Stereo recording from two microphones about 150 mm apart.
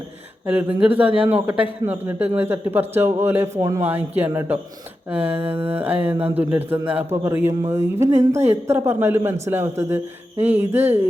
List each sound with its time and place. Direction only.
0.4 s a man's voice: 10° right (ahead or behind)
5.4 s mantra: 35° right (ahead or behind)
5.8 s a man's voice: 10° right (ahead or behind)